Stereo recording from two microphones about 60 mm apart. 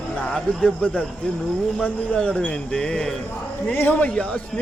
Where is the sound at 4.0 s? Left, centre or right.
Left.